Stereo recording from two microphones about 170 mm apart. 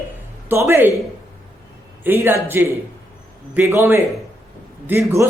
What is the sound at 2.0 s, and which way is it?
A man's voice, 10° right (ahead or behind).